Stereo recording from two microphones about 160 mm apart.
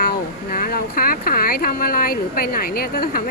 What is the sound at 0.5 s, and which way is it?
A woman's voice, 65° left (ahead or behind).